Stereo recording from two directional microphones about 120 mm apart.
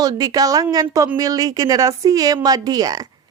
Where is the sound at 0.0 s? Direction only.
35° right (ahead or behind).